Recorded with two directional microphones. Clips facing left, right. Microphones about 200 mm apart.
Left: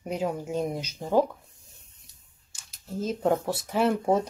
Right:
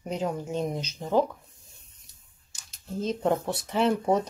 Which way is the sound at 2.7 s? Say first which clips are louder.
Right 1 dB; 5° left (ahead or behind).